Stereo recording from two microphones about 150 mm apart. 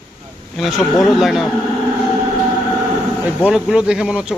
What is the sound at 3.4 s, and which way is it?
Speech, 5° right (ahead or behind).